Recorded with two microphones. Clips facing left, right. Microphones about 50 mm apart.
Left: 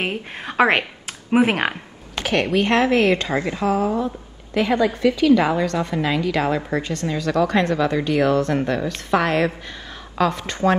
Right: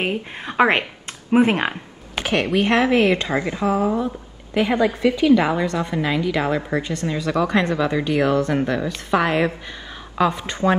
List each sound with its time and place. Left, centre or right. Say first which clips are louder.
0.0 s speech: right 1 dB; centre
2.1 s speech: even; centre
8.9 s a woman's voice: even; centre